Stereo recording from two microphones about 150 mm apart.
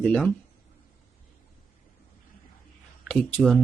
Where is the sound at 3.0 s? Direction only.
5° left (ahead or behind).